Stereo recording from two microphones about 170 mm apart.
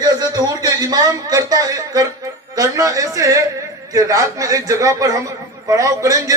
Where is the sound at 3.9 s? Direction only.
20° right (ahead or behind).